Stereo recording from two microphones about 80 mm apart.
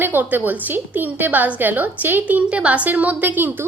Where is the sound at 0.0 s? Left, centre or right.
Right.